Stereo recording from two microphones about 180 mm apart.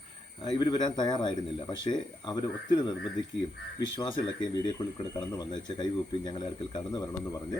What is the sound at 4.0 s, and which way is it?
Speech, 25° left (ahead or behind).